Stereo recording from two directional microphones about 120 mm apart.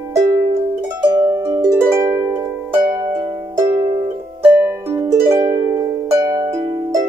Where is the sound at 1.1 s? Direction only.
25° right (ahead or behind).